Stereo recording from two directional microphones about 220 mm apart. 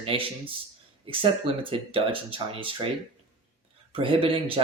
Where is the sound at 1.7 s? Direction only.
25° right (ahead or behind).